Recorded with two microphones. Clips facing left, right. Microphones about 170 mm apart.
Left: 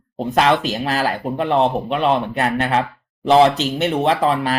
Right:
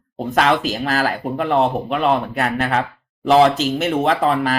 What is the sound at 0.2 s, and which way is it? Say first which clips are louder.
Speech: left 1 dB; centre (ahead or behind).